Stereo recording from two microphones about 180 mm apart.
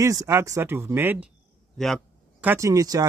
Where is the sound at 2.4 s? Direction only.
15° right (ahead or behind).